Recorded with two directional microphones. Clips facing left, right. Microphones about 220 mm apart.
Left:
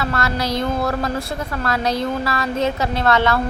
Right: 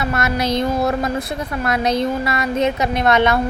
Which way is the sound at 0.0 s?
20° right (ahead or behind).